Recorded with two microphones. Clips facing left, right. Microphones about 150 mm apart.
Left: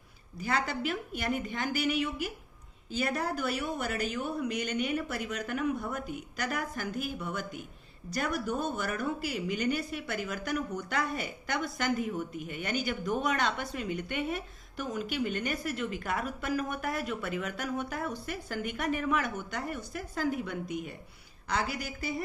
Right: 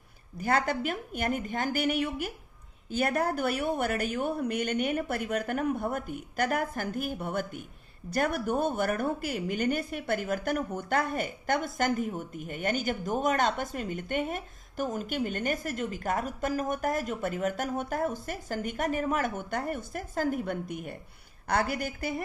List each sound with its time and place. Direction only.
0.3 s a woman's voice: 50° right (ahead or behind)